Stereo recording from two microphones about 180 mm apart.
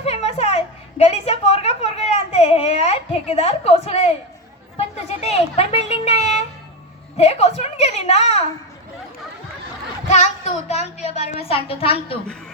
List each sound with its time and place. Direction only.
0.0 s a sound: 35° left (ahead or behind)
4.8 s a woman's voice: 35° left (ahead or behind)
10.1 s a woman's voice: 40° left (ahead or behind)